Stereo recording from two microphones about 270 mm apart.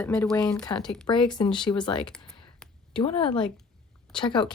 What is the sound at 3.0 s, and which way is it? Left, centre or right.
Speech, centre.